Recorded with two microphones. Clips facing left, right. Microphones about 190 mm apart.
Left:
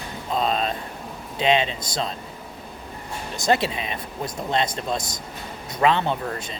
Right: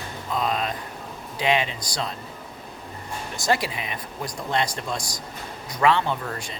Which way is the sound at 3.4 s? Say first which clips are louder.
Left 3 dB; 25° left (ahead or behind).